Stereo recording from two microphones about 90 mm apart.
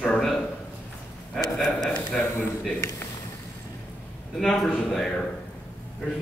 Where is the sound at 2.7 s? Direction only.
30° left (ahead or behind).